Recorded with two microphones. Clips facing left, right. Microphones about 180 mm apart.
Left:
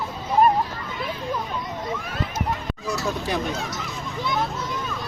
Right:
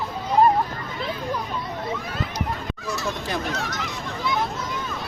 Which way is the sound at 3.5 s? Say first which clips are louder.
Right 1 dB; 75° right (ahead or behind).